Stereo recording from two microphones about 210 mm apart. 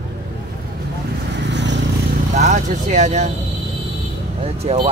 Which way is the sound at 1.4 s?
55° right (ahead or behind).